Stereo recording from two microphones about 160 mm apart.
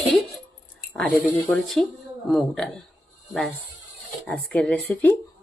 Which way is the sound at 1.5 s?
Centre (ahead or behind).